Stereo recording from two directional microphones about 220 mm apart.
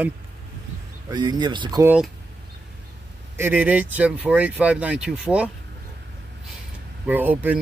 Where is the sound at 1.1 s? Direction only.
20° right (ahead or behind).